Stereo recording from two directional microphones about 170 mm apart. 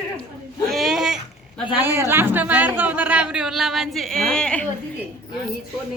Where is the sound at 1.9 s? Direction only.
15° right (ahead or behind); by 4.7 s 5° left (ahead or behind).